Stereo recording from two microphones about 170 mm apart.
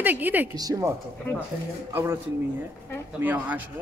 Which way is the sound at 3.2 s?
10° right (ahead or behind).